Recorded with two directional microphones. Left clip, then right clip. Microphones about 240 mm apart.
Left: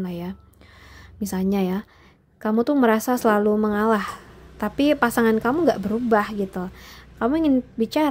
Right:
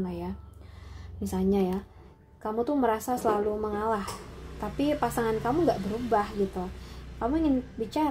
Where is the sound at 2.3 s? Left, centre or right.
Left.